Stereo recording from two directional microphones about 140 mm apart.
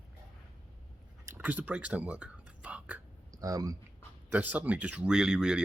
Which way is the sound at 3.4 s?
25° right (ahead or behind).